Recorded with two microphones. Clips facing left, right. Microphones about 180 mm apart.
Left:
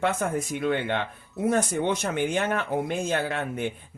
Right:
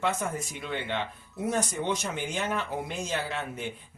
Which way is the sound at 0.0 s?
55° left (ahead or behind).